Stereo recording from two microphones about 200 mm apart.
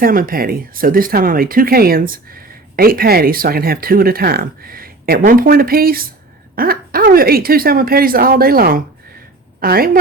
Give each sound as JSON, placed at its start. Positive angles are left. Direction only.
{"t": 0.0, "sound": "speech", "side_deg": -45}